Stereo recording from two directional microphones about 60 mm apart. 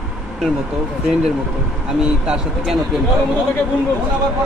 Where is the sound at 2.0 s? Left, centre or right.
Centre.